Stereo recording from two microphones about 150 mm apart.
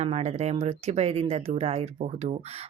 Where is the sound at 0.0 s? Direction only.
45° right (ahead or behind).